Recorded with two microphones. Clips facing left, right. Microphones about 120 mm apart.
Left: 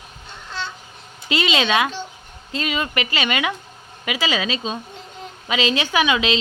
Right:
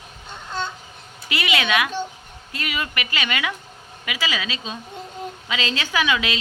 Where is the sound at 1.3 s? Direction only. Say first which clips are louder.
Left 3 dB; 25° left (ahead or behind).